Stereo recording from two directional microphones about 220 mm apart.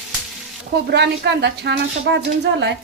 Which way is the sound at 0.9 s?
50° right (ahead or behind).